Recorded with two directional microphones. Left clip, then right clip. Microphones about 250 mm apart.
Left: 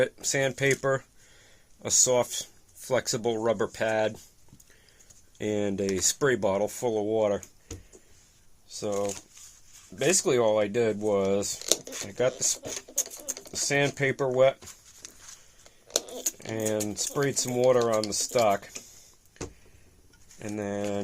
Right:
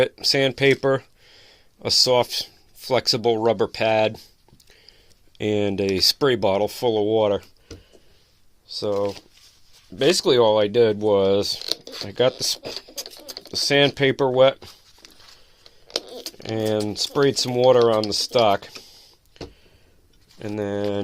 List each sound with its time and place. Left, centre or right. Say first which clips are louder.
0.0 s speech: right 7 dB; right
5.4 s speech: right 6 dB; right
8.7 s speech: right 6 dB; right
11.6 s speech: right 1 dB; centre
12.0 s speech: right 7 dB; right
15.0 s a sound: even; centre
16.4 s speech: right 7 dB; right
20.4 s speech: right 6 dB; right